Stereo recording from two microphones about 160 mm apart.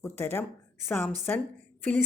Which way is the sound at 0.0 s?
15° left (ahead or behind).